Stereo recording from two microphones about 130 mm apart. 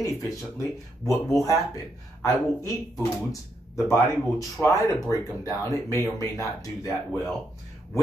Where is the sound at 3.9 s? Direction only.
20° left (ahead or behind).